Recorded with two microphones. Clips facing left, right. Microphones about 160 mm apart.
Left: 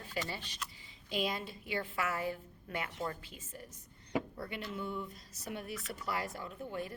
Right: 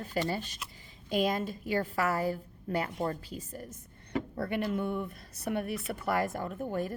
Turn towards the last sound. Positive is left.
turn(degrees=-45)  # may be behind; listen again after turning